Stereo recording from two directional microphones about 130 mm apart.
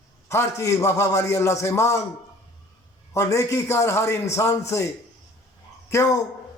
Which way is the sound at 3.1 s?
20° left (ahead or behind).